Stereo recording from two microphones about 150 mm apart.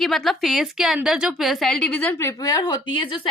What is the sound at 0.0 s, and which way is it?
A woman's voice, centre (ahead or behind).